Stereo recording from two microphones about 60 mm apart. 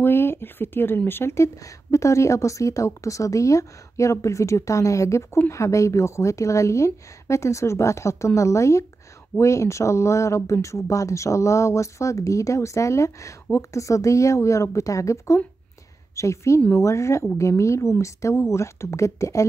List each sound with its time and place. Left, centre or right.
0.0 s speech: left